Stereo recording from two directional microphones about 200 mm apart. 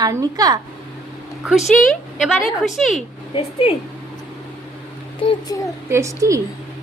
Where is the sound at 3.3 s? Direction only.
25° left (ahead or behind).